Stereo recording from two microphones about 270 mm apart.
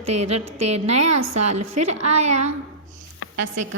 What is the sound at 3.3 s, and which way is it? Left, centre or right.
Speech, right.